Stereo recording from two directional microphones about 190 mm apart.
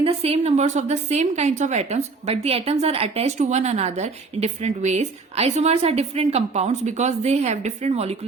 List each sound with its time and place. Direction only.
0.0 s a woman's voice: 30° right (ahead or behind)